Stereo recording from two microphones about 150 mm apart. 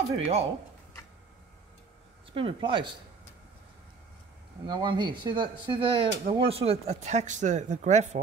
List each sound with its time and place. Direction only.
0.1 s speech: 45° right (ahead or behind)
2.3 s speech: 35° right (ahead or behind)
4.6 s speech: 30° right (ahead or behind); by 8.2 s 50° right (ahead or behind)